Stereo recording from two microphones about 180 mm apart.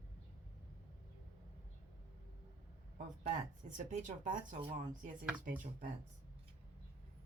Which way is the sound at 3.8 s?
45° right (ahead or behind).